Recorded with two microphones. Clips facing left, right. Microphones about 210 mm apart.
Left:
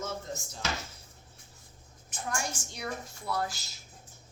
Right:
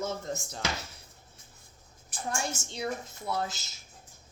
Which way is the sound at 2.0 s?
25° right (ahead or behind).